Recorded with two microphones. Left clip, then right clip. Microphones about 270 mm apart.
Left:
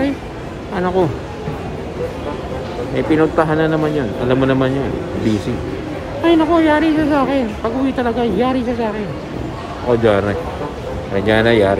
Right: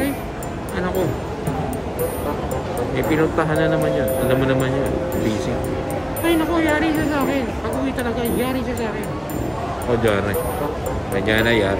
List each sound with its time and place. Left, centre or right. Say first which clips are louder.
3.1 s speech: left 6 dB; centre
6.2 s speech: left 6 dB; centre
10.0 s speech: left 4 dB; centre